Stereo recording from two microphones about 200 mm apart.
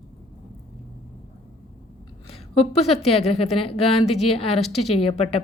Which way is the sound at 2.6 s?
30° left (ahead or behind).